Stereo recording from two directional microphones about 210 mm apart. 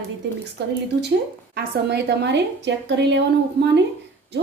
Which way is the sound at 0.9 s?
55° right (ahead or behind).